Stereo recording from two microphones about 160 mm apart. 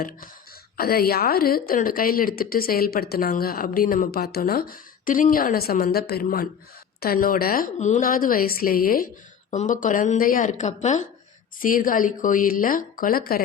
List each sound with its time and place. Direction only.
0.8 s a woman's voice: 70° left (ahead or behind)
9.5 s a woman's voice: 55° left (ahead or behind)
11.6 s a woman's voice: 60° left (ahead or behind)